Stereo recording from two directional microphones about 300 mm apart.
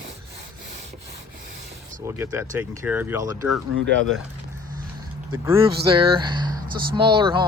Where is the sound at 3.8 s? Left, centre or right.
Right.